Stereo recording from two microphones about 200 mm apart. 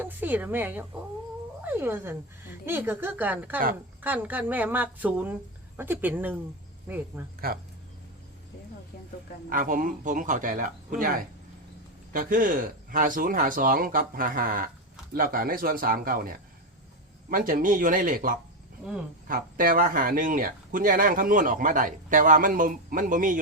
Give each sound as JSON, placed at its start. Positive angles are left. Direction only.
{"t": 0.0, "sound": "speech", "side_deg": -10}
{"t": 9.5, "sound": "speech", "side_deg": -45}